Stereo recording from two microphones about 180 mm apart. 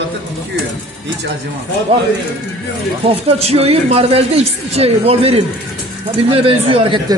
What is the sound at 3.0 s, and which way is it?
Speech, 35° right (ahead or behind).